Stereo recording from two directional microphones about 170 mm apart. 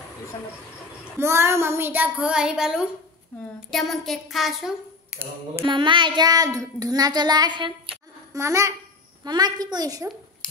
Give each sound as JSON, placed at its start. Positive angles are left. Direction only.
{"t": 1.1, "sound": "a child's voice", "side_deg": -15}
{"t": 5.7, "sound": "child singing", "side_deg": -30}
{"t": 8.3, "sound": "a child's voice", "side_deg": -15}
{"t": 9.2, "sound": "child singing", "side_deg": -25}